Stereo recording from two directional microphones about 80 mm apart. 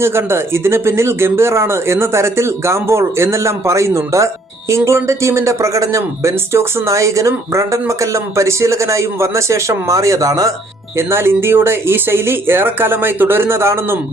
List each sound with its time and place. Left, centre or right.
0.0 s speech: right
10.9 s speech: right